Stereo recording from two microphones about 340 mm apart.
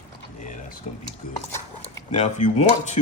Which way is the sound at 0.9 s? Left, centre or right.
Left.